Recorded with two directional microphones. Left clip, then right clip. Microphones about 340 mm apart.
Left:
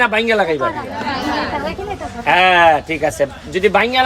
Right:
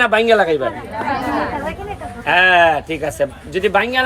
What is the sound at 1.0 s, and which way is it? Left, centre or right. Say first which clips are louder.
Chatter: right 1 dB; centre.